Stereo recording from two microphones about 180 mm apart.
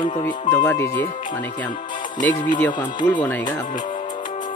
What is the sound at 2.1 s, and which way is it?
Speech, 45° left (ahead or behind).